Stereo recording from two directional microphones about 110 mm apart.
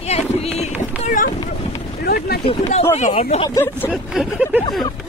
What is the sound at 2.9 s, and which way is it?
Speech, 80° left.